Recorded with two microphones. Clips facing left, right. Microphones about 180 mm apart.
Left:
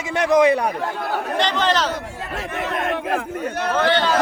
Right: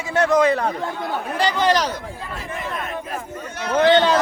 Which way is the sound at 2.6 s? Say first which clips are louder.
Left 7 dB; 75° left (ahead or behind).